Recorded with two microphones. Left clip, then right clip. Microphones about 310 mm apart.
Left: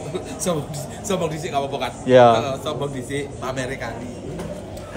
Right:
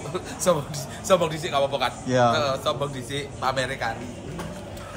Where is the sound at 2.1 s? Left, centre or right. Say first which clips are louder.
Left 9 dB; centre.